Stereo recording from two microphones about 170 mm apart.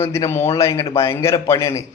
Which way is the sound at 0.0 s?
15° left (ahead or behind).